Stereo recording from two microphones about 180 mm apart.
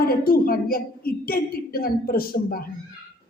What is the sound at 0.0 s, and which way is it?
A woman's voice, 55° left (ahead or behind).